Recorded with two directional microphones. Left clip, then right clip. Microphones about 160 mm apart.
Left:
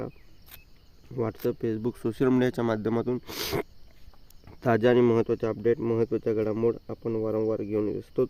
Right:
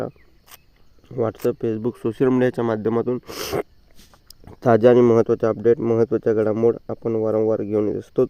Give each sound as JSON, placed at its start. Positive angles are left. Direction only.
{"t": 1.1, "sound": "speech", "side_deg": -15}
{"t": 4.4, "sound": "speech", "side_deg": -30}